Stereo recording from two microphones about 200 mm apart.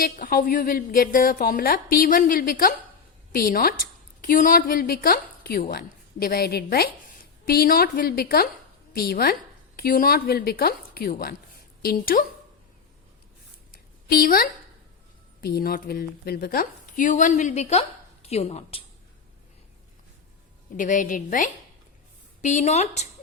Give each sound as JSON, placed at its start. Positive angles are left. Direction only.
{"t": 0.0, "sound": "a woman's voice", "side_deg": 45}
{"t": 14.1, "sound": "a woman's voice", "side_deg": 45}
{"t": 20.7, "sound": "a woman's voice", "side_deg": 40}